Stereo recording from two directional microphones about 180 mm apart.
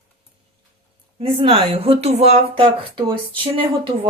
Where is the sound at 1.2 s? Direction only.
30° right (ahead or behind).